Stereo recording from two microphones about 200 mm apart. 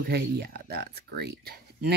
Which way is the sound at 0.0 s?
50° right (ahead or behind).